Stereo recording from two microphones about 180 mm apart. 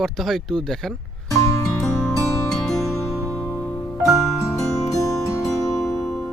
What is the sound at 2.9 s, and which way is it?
Music, 15° left (ahead or behind).